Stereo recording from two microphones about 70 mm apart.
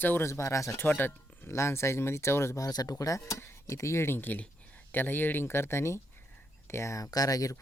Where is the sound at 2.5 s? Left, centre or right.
Left.